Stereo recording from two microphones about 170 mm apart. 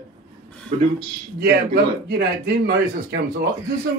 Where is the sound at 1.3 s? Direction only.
70° right (ahead or behind).